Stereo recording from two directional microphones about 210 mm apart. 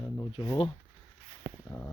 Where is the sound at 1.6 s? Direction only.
15° left (ahead or behind).